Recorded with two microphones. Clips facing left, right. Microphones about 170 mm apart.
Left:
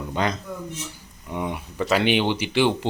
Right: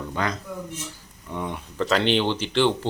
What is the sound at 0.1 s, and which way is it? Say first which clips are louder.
Speech: left 4 dB; 20° left (ahead or behind).